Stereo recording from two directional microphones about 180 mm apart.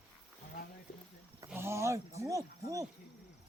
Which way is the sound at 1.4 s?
15° right (ahead or behind).